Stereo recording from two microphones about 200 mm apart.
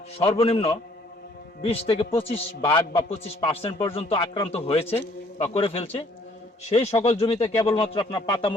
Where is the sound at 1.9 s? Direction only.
25° left (ahead or behind).